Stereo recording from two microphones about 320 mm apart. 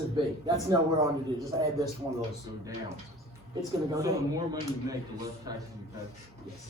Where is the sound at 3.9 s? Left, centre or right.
Centre.